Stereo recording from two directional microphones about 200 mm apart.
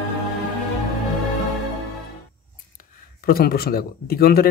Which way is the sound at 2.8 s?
45° left (ahead or behind).